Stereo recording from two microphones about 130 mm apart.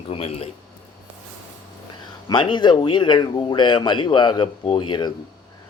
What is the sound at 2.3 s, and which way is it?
Speech, 35° left (ahead or behind).